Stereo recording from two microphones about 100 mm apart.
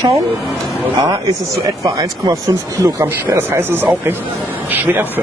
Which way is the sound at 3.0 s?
25° right (ahead or behind).